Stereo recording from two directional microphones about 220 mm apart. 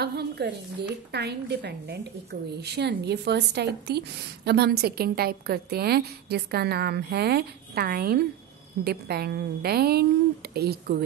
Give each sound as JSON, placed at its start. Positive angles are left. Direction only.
{"t": 0.0, "sound": "a woman's voice", "side_deg": -50}